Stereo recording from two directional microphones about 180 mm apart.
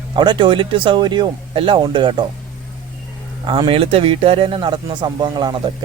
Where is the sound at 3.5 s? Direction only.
30° right (ahead or behind).